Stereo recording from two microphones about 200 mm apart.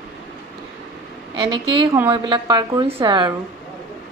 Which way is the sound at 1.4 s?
25° right (ahead or behind).